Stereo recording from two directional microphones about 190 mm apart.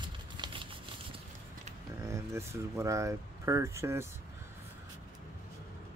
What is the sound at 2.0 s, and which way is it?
Speech, 15° right (ahead or behind).